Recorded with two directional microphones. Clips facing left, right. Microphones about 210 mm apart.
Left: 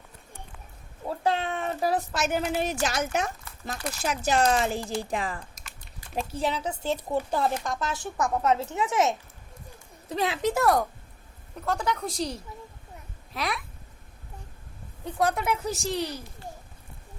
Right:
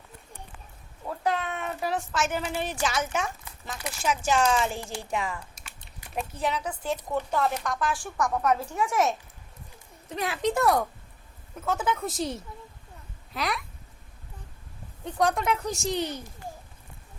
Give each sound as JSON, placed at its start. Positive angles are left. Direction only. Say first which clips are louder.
{"t": 1.0, "sound": "a sound", "louder": "left 2 dB", "side_deg": 30}
{"t": 2.8, "sound": "speech", "louder": "left 1 dB", "side_deg": 40}
{"t": 10.4, "sound": "a woman's voice", "louder": "right 1 dB", "side_deg": 0}
{"t": 15.0, "sound": "a woman's voice", "louder": "right 1 dB", "side_deg": 5}